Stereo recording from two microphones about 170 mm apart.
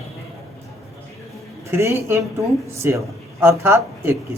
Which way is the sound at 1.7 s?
15° right (ahead or behind).